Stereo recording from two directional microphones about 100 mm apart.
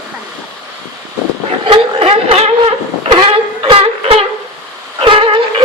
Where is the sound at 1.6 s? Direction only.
60° right (ahead or behind); by 2.5 s 75° right (ahead or behind).